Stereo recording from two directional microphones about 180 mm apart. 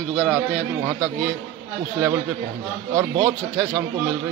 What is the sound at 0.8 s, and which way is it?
Speech, 15° right (ahead or behind).